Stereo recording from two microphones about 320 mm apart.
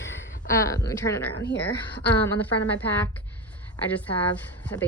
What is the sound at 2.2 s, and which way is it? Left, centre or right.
Speech, centre.